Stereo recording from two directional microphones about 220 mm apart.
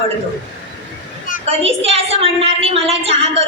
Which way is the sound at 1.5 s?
25° right (ahead or behind).